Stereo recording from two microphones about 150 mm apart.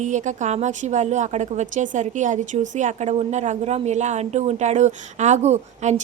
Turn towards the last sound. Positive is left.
turn(degrees=-50)  # may be behind; listen again after turning